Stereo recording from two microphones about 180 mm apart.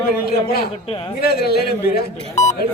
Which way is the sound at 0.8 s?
30° left (ahead or behind).